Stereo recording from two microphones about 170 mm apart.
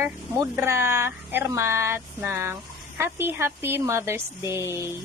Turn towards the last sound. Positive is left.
turn(degrees=-15)  # may be behind; listen again after turning